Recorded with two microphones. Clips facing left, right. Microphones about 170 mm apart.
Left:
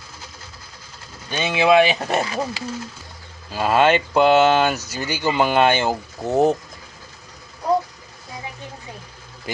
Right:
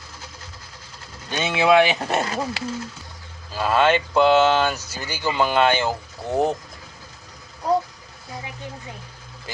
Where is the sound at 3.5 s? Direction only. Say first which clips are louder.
Left 2 dB; 15° left (ahead or behind).